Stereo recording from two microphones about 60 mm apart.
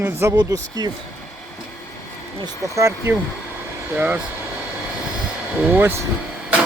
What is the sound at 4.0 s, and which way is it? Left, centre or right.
Speech, right.